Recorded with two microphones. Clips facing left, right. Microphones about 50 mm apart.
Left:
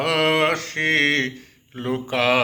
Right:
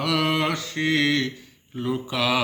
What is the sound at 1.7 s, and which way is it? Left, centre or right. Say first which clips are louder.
Speech: left 3 dB; left.